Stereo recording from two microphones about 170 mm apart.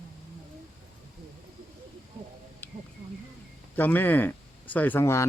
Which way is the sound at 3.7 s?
10° left (ahead or behind).